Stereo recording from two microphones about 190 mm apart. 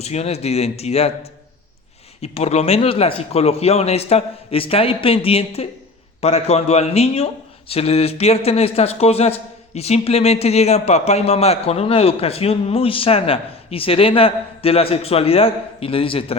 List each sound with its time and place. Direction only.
0.0 s speech: 35° left (ahead or behind)